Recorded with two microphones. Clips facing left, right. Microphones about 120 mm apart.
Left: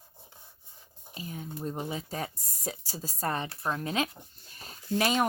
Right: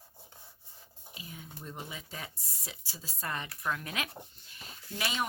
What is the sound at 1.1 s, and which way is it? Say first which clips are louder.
Speech: left 9 dB; 40° left (ahead or behind).